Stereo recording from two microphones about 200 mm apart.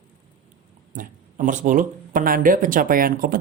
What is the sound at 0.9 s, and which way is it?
Speech, 40° right (ahead or behind).